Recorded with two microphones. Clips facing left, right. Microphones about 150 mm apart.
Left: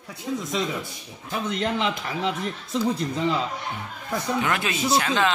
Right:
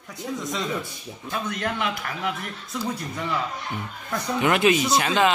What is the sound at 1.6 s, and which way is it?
Speech, 25° left (ahead or behind).